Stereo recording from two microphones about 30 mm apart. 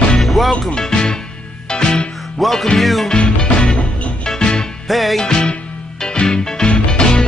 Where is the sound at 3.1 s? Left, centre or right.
Left.